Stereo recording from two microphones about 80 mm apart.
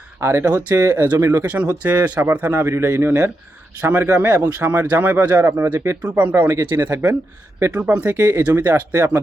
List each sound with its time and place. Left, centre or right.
0.2 s speech: right
1.9 s speech: right
6.0 s speech: right
8.1 s speech: right